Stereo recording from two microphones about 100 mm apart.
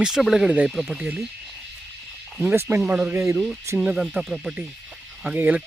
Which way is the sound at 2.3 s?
15° right (ahead or behind).